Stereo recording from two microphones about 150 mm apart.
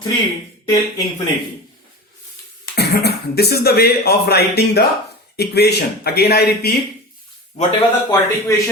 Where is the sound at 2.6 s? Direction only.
90° left.